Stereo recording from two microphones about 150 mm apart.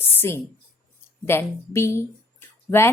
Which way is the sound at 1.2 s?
15° left (ahead or behind).